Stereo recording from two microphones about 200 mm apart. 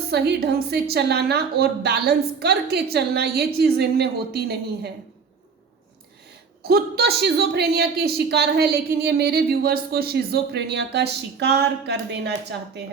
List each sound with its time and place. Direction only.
0.1 s speech: 55° right (ahead or behind)
6.7 s speech: 50° right (ahead or behind)